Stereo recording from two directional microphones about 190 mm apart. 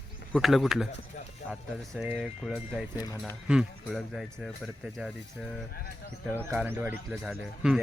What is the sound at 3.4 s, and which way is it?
Speech, centre (ahead or behind).